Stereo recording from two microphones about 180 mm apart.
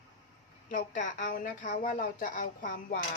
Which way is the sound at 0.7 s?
45° left (ahead or behind).